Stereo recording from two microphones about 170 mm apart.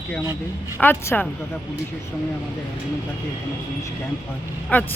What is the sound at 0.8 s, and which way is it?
Speech, 10° left (ahead or behind).